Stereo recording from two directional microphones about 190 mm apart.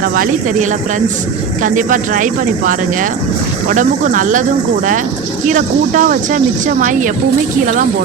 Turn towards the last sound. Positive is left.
turn(degrees=-40)  # may be behind; listen again after turning